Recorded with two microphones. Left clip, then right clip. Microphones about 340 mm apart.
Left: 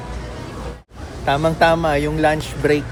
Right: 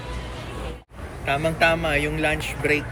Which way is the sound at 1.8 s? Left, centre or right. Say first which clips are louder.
Left 4 dB; left.